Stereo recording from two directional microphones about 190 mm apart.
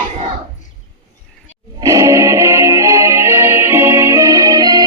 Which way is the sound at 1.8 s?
20° right (ahead or behind).